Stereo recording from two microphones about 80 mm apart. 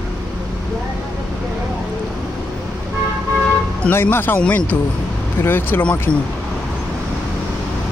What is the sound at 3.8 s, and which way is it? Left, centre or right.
Speech, left.